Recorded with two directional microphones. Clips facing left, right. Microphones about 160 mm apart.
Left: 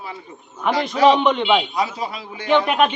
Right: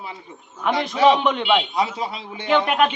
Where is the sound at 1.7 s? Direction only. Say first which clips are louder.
Even; 25° right (ahead or behind).